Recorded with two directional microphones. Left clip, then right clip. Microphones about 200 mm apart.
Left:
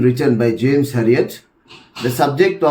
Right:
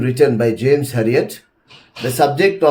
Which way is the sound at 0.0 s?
35° right (ahead or behind).